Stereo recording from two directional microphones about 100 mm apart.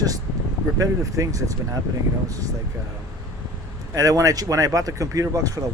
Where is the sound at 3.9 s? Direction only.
35° right (ahead or behind).